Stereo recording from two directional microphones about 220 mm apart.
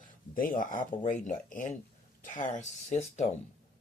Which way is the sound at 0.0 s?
40° left (ahead or behind).